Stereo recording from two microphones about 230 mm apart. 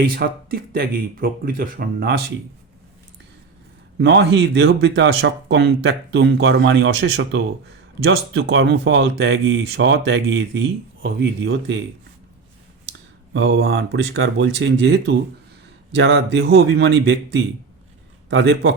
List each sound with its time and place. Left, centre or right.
0.0 s speech: right
3.9 s speech: right
13.3 s speech: right